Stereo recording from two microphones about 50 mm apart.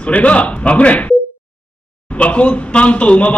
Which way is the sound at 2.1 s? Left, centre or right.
Left.